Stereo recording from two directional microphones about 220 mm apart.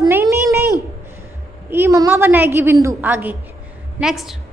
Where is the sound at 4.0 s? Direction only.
Centre (ahead or behind).